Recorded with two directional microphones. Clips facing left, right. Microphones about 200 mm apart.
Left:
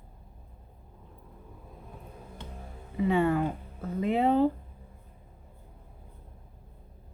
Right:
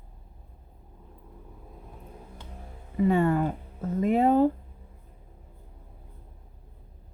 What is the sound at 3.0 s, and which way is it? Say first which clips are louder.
Speech: right 2 dB; 45° right (ahead or behind).